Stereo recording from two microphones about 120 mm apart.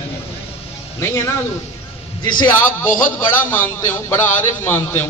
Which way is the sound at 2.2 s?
40° left (ahead or behind).